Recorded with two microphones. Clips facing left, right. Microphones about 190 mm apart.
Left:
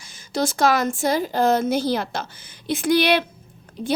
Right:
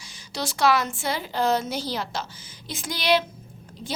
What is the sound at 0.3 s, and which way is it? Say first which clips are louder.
A woman's voice: left 3 dB; 50° left (ahead or behind).